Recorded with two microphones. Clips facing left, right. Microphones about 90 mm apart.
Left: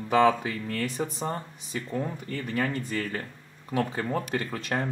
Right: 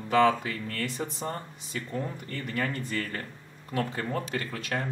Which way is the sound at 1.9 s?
15° left (ahead or behind).